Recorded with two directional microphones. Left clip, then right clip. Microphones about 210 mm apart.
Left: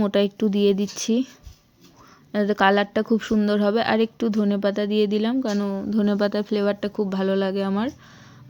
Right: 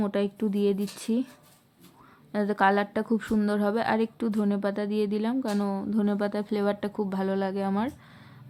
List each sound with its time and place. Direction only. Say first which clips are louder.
0.0 s speech: left 7 dB; 20° left (ahead or behind)
2.3 s speech: left 5 dB; 15° left (ahead or behind)